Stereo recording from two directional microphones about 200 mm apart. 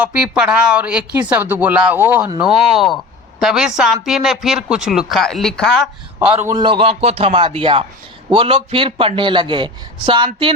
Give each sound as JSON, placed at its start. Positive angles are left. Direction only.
{"t": 0.0, "sound": "speech", "side_deg": -5}
{"t": 6.4, "sound": "a man's voice", "side_deg": -20}